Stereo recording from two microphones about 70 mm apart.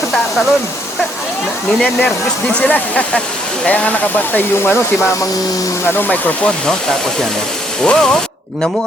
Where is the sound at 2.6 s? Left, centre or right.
Left.